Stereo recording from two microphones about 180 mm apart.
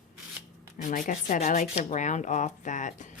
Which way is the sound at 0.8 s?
45° left (ahead or behind).